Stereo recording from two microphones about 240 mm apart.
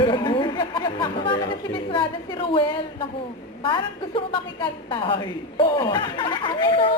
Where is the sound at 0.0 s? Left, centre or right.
Centre.